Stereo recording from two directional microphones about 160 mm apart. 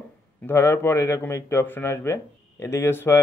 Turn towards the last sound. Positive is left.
turn(degrees=15)  # may be behind; listen again after turning